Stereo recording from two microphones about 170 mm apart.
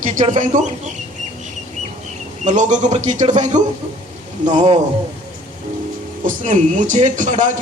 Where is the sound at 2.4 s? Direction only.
45° right (ahead or behind).